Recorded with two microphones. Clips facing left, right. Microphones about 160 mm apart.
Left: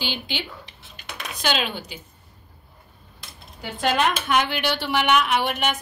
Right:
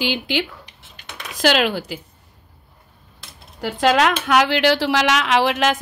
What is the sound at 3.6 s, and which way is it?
A woman's voice, 90° right.